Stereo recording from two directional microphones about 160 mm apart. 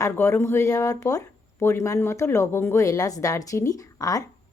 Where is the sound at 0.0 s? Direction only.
15° left (ahead or behind).